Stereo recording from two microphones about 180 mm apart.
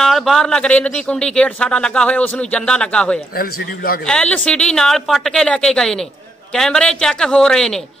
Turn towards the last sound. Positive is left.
turn(degrees=5)  # may be behind; listen again after turning